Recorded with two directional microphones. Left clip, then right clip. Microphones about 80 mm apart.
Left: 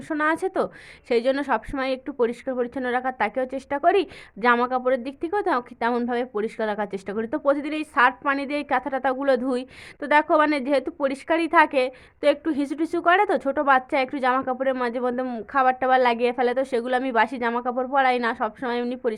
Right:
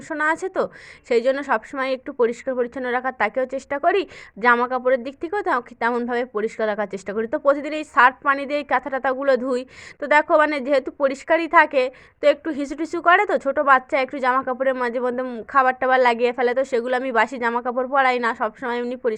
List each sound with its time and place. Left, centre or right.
0.1 s a woman's voice: right
15.2 s speech: centre
15.5 s a woman's voice: right